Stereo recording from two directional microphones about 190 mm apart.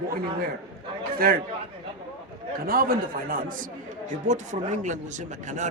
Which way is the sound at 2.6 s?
50° right (ahead or behind).